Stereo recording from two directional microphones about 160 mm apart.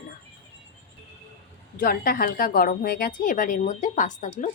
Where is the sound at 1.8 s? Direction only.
65° left (ahead or behind).